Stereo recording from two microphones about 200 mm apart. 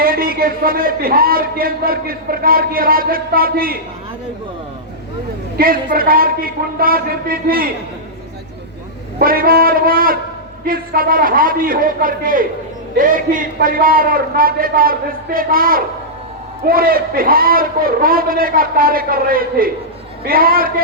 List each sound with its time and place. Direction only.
0.0 s a man's voice: 45° right (ahead or behind)
5.5 s a man's voice: 45° right (ahead or behind)
9.1 s a man's voice: 45° right (ahead or behind)